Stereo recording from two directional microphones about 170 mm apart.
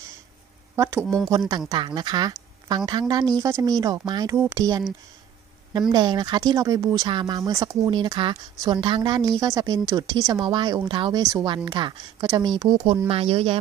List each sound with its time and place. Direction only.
0.7 s a woman's voice: 15° right (ahead or behind)
1.7 s speech: 25° right (ahead or behind)